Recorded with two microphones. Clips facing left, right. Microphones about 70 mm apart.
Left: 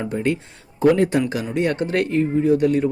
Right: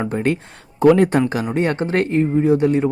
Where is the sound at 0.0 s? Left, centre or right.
Right.